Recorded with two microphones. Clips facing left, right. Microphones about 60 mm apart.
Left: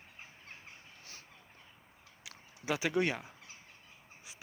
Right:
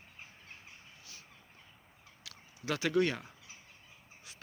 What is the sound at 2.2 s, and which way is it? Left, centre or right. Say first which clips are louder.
Speech: left 1 dB; centre.